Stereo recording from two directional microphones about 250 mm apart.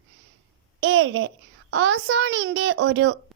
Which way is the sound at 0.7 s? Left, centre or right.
Right.